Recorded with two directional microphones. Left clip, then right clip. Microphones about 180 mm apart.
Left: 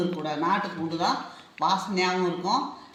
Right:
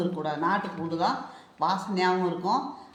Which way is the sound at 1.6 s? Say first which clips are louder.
Left 2 dB; 10° right (ahead or behind).